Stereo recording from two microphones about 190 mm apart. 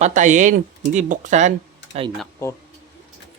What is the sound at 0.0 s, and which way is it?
Speech, 40° right (ahead or behind).